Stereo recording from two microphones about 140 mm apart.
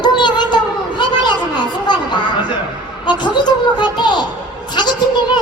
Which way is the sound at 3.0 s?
35° left (ahead or behind).